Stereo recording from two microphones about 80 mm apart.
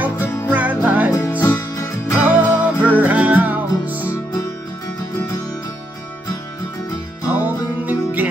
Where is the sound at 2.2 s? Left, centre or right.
Centre.